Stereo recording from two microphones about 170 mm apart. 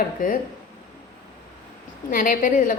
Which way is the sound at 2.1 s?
55° left (ahead or behind).